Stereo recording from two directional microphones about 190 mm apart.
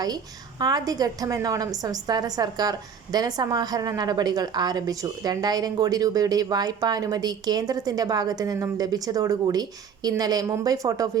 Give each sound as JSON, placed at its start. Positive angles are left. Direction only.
{"t": 0.6, "sound": "a woman's voice", "side_deg": -20}